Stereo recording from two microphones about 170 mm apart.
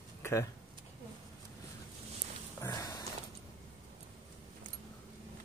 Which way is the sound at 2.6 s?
20° left (ahead or behind).